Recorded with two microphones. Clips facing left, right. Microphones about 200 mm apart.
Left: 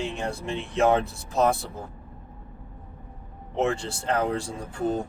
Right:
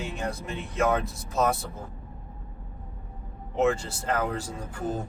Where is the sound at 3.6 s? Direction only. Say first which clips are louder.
Right 1 dB; 30° left (ahead or behind).